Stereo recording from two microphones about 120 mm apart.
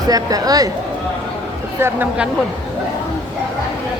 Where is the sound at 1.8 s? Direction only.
15° right (ahead or behind).